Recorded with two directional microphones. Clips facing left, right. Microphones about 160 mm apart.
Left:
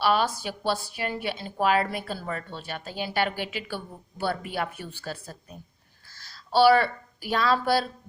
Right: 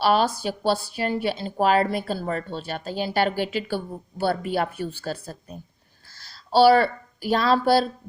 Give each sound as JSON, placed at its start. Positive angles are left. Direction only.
{"t": 0.0, "sound": "speech", "side_deg": -35}